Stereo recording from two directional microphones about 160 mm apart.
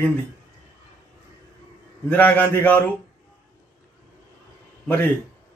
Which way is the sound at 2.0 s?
10° left (ahead or behind).